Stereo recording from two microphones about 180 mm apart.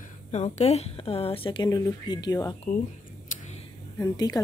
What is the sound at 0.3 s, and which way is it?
A woman's voice, 40° left (ahead or behind).